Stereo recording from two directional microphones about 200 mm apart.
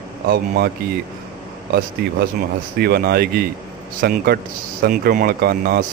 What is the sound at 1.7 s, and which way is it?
Speech, 55° right (ahead or behind).